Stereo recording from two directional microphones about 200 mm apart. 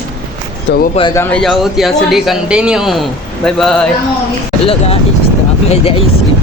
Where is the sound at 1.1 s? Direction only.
10° left (ahead or behind).